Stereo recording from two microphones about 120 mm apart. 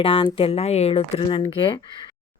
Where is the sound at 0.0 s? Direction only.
50° left (ahead or behind).